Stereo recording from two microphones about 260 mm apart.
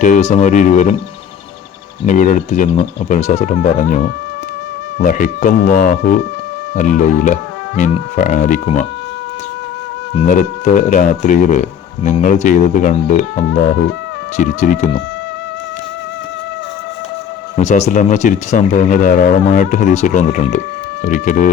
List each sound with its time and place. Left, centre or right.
0.0 s speech: left
2.0 s speech: left
10.2 s speech: left
17.6 s speech: left